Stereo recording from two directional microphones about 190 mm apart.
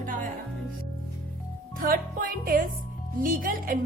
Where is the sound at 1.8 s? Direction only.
50° right (ahead or behind).